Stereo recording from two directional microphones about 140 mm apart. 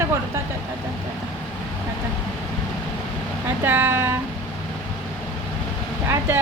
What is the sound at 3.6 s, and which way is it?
Speech, 15° right (ahead or behind).